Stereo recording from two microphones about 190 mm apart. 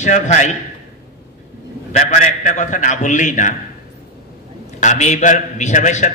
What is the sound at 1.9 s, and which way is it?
A man's voice, 40° left (ahead or behind).